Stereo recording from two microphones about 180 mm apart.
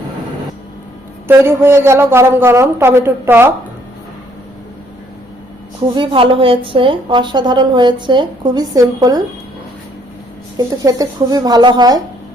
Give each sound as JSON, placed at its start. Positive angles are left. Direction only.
{"t": 1.3, "sound": "a man's voice", "side_deg": -15}
{"t": 5.9, "sound": "a woman's voice", "side_deg": -25}
{"t": 10.6, "sound": "a woman's voice", "side_deg": -20}